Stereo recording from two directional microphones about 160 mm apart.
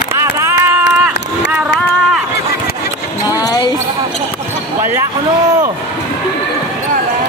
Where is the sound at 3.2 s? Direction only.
25° left (ahead or behind).